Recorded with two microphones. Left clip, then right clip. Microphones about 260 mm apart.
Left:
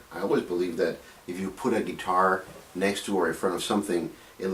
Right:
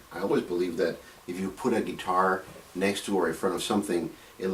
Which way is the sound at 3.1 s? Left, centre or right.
Centre.